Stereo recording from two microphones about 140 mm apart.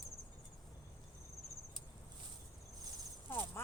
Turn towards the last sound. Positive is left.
turn(degrees=15)  # may be behind; listen again after turning